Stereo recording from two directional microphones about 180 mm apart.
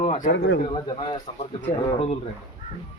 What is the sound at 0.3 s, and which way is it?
Speech, 90° left.